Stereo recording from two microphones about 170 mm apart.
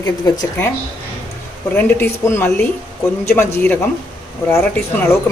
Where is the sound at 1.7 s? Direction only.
10° left (ahead or behind).